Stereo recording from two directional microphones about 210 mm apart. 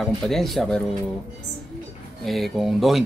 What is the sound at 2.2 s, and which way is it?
Speech, centre (ahead or behind).